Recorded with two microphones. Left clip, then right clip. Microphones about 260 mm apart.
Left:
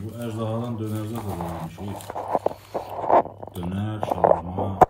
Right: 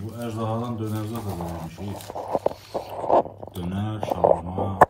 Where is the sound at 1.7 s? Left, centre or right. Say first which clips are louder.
Left 1 dB; centre.